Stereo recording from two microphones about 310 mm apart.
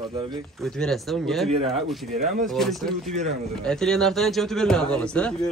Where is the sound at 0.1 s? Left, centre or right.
Centre.